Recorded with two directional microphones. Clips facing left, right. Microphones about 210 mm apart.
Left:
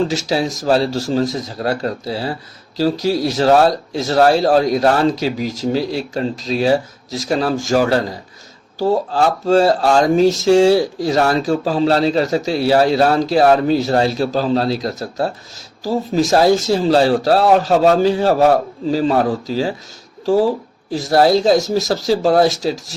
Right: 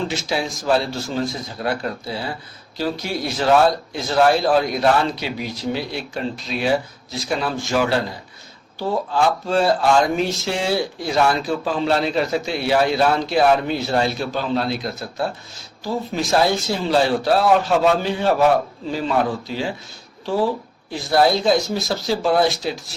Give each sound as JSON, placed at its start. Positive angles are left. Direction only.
{"t": 0.1, "sound": "speech", "side_deg": 40}